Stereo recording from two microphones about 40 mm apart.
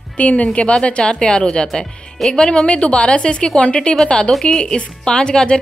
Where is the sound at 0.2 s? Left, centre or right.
Left.